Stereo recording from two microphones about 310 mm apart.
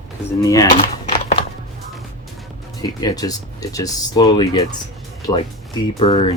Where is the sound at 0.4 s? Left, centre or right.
Centre.